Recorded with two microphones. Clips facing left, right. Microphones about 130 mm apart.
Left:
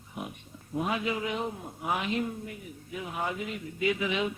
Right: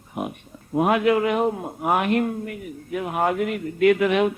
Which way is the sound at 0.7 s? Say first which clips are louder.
Right 12 dB; 65° right (ahead or behind).